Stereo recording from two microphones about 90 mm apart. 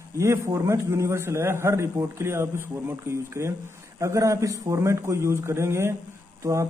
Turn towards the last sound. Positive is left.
turn(degrees=-35)  # may be behind; listen again after turning